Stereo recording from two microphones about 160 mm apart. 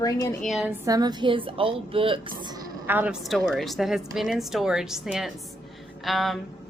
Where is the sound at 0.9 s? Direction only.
25° right (ahead or behind).